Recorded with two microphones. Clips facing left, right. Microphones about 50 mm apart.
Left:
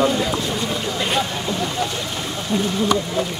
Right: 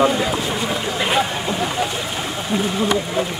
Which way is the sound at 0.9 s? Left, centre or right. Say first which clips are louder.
Right 3 dB; centre.